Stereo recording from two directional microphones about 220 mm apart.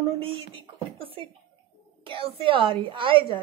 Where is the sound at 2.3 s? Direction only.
25° right (ahead or behind).